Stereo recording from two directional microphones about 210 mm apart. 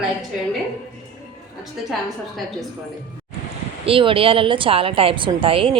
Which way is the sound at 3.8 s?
25° right (ahead or behind).